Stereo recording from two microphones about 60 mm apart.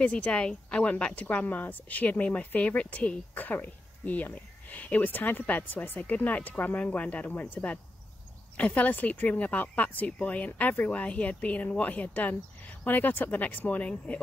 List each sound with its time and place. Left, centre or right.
0.0 s speech: centre